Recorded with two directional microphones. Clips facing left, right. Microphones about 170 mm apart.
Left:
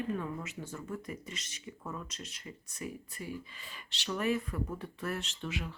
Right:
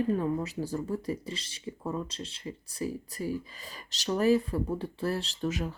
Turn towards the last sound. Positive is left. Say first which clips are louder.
# right 7 dB
turn(degrees=-40)  # may be behind; listen again after turning